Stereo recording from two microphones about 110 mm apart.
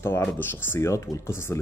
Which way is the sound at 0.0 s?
20° left (ahead or behind).